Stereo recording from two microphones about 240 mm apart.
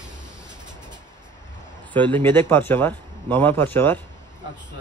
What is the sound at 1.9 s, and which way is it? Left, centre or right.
Speech, centre.